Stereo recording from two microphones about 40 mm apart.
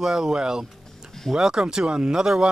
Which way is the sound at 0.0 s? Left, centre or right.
Centre.